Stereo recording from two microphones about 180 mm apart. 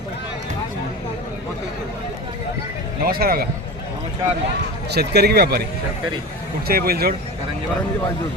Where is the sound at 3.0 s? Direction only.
55° right (ahead or behind).